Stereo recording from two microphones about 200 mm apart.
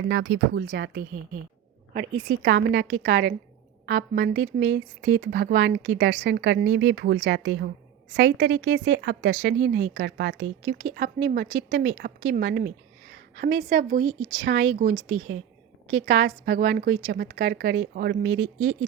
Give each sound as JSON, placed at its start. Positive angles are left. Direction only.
{"t": 0.1, "sound": "speech", "side_deg": -60}
{"t": 1.9, "sound": "speech", "side_deg": -40}
{"t": 2.4, "sound": "a woman's voice", "side_deg": -60}
{"t": 14.2, "sound": "speech", "side_deg": -65}
{"t": 15.0, "sound": "a woman's voice", "side_deg": -80}
{"t": 15.9, "sound": "speech", "side_deg": -70}